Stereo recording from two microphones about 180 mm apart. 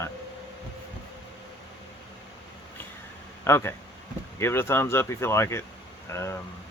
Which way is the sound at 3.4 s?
15° left (ahead or behind).